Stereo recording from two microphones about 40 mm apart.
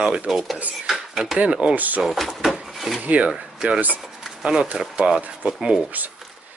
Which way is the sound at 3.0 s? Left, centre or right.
Right.